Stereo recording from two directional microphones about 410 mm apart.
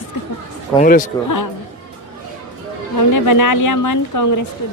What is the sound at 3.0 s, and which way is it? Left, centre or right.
A woman's voice, left.